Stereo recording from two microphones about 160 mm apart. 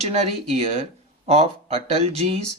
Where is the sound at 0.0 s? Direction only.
40° right (ahead or behind).